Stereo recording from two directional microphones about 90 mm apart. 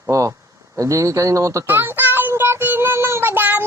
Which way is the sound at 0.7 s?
35° right (ahead or behind).